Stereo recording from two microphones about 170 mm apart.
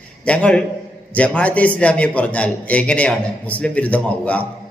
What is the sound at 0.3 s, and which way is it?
A man's voice, 5° left (ahead or behind).